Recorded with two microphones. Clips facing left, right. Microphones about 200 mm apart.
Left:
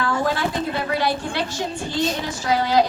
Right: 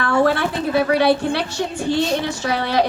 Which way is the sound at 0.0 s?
70° right (ahead or behind).